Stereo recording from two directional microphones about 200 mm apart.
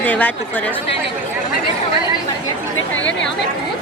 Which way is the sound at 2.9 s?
70° left (ahead or behind).